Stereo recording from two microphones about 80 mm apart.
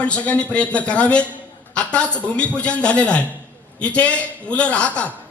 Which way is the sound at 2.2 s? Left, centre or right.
Centre.